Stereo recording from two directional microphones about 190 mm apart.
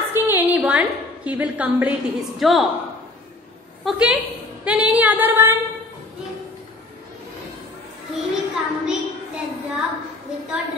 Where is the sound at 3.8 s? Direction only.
5° right (ahead or behind).